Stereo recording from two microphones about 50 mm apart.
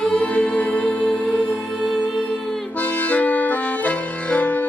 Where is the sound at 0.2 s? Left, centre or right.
Left.